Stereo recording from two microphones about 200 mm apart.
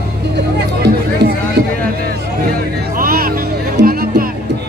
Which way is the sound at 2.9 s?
45° right (ahead or behind).